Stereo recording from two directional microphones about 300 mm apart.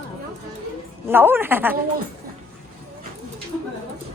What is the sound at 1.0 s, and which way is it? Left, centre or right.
Speech, centre.